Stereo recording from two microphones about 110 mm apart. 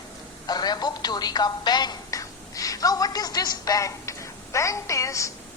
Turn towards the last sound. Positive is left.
turn(degrees=30)  # may be behind; listen again after turning